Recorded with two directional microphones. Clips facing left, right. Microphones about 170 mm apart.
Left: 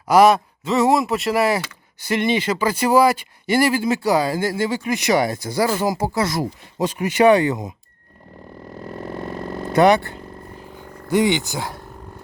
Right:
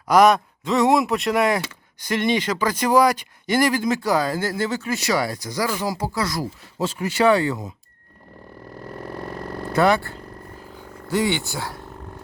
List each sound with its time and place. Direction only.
0.1 s speech: 5° left (ahead or behind)
9.1 s vehicle: 20° left (ahead or behind)
11.1 s speech: 15° left (ahead or behind)